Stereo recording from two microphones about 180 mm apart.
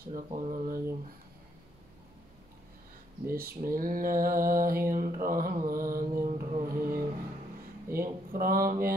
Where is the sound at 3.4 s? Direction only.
55° right (ahead or behind).